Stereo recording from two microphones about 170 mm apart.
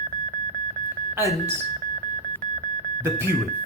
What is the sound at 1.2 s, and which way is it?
Speech, 15° right (ahead or behind).